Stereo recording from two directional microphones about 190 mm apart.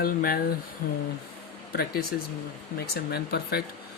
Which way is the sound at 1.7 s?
55° left (ahead or behind).